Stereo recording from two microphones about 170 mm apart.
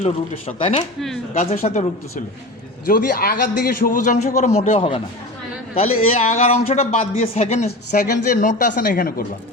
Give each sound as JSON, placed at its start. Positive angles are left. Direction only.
{"t": 0.0, "sound": "a man's voice", "side_deg": 35}
{"t": 2.8, "sound": "a man's voice", "side_deg": 55}
{"t": 7.9, "sound": "a man's voice", "side_deg": 55}